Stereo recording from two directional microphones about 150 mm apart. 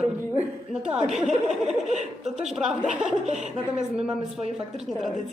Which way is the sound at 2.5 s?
5° right (ahead or behind).